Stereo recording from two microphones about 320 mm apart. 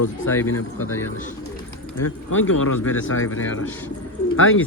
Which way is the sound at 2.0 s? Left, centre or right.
Left.